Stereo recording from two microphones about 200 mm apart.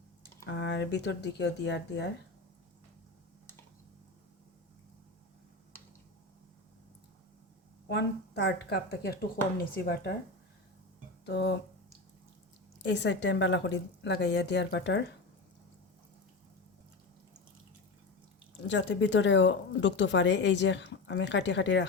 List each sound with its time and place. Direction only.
0.4 s speech: 60° left (ahead or behind)
7.9 s speech: 60° left (ahead or behind)
11.3 s speech: 55° left (ahead or behind)
12.8 s speech: 60° left (ahead or behind)
18.7 s speech: 65° left (ahead or behind)